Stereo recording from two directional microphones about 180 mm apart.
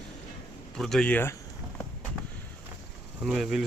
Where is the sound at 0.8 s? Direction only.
Centre (ahead or behind).